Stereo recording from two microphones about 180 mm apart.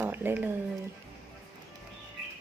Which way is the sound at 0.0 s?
10° right (ahead or behind).